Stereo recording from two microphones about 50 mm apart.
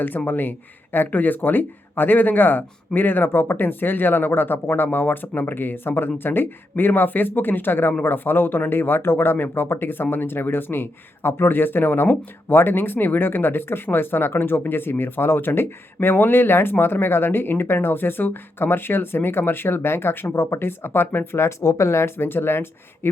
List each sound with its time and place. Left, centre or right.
0.3 s speech: left
20.2 s speech: left
21.4 s speech: left
22.3 s speech: left